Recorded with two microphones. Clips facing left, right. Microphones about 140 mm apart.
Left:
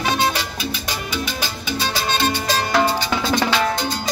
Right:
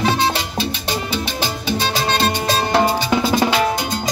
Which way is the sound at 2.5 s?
25° right (ahead or behind).